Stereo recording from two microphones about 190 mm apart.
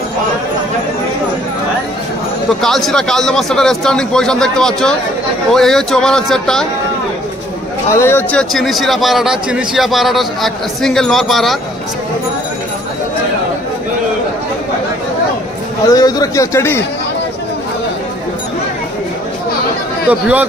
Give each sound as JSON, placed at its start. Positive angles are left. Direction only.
{"t": 2.6, "sound": "a man's voice", "side_deg": 0}
{"t": 7.9, "sound": "a man's voice", "side_deg": 10}
{"t": 15.9, "sound": "speech", "side_deg": 20}
{"t": 20.1, "sound": "speech", "side_deg": -5}